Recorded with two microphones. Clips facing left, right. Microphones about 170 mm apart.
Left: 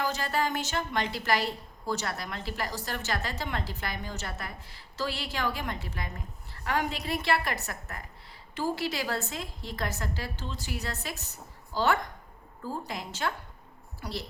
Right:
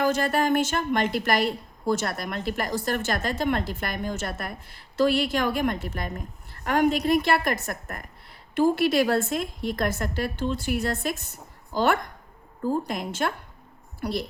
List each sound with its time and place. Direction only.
0.0 s a woman's voice: 50° right (ahead or behind)